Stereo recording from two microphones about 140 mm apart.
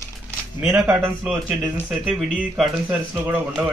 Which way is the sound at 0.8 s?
5° right (ahead or behind).